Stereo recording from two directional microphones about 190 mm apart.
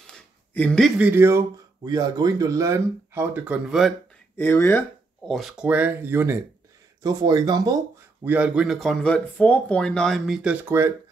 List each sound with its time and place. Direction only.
0.0 s a sound: 5° left (ahead or behind); by 1.4 s 15° right (ahead or behind)
1.9 s speech: 20° right (ahead or behind); by 3.9 s 5° right (ahead or behind)
4.4 s speech: 10° left (ahead or behind)
5.3 s speech: centre (ahead or behind); by 7.8 s 20° right (ahead or behind)
8.3 s speech: 5° right (ahead or behind)